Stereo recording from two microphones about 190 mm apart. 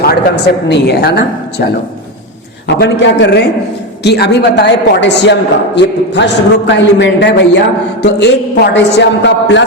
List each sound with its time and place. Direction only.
0.0 s a man's voice: 55° left (ahead or behind)